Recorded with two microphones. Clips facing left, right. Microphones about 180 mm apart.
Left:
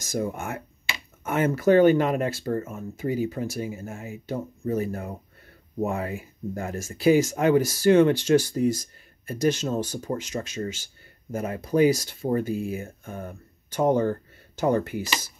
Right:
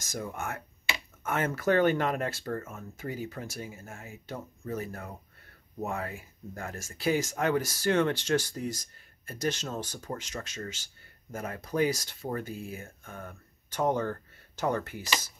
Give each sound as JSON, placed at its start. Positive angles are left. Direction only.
{"t": 0.1, "sound": "speech", "side_deg": 20}
{"t": 13.7, "sound": "speech", "side_deg": 10}
{"t": 14.5, "sound": "a sound", "side_deg": 5}
{"t": 14.8, "sound": "speech", "side_deg": 10}